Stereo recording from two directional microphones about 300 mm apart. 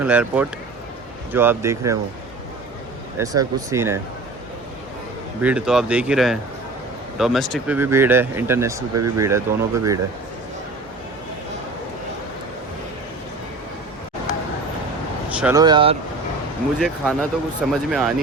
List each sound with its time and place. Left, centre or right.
0.0 s speech: centre
3.2 s speech: centre
5.4 s speech: centre
9.0 s speech: right
9.2 s speech: centre
15.4 s speech: centre
16.8 s speech: centre